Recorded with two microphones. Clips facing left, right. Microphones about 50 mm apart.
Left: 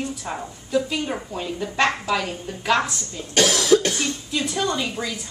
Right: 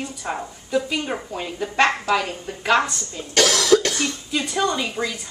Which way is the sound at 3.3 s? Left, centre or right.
Centre.